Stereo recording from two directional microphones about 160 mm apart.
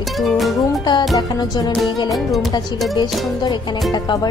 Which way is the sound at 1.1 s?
25° left (ahead or behind).